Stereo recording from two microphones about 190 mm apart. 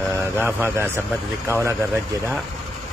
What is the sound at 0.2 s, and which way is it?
Speech, 10° right (ahead or behind).